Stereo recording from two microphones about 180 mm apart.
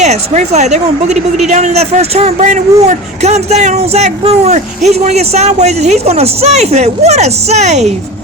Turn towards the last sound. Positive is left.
turn(degrees=-40)  # may be behind; listen again after turning